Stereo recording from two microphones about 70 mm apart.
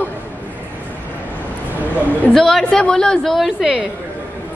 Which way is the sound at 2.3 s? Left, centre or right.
Centre.